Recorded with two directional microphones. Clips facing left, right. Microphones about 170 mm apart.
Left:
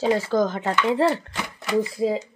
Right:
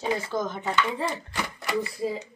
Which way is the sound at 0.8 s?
75° left (ahead or behind).